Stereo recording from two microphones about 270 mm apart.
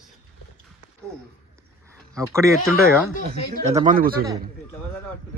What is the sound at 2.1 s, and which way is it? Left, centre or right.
Speech, centre.